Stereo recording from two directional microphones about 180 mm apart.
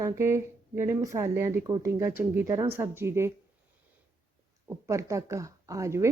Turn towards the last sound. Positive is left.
turn(degrees=-15)  # may be behind; listen again after turning